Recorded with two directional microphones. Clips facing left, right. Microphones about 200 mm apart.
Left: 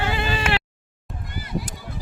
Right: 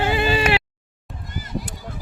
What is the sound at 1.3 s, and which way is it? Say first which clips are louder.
Goose: even; 45° right (ahead or behind).